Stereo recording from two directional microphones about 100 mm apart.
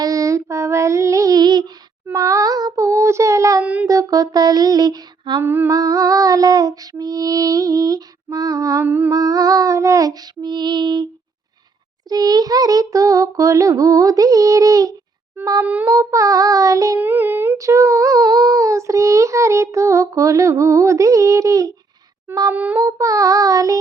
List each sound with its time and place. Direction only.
0.0 s child singing: 35° right (ahead or behind)
3.6 s a sound: 15° right (ahead or behind)
3.8 s music: 35° right (ahead or behind)
5.4 s humming: 20° right (ahead or behind)
5.7 s music: 35° right (ahead or behind)
8.8 s humming: 20° right (ahead or behind)
9.1 s child singing: 35° right (ahead or behind)
17.0 s humming: 20° right (ahead or behind)
17.6 s child singing: 30° right (ahead or behind)
22.5 s a sound: 15° right (ahead or behind)
22.8 s child singing: 30° right (ahead or behind)